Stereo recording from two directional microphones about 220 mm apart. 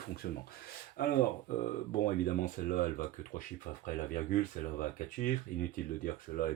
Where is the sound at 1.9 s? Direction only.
35° left (ahead or behind).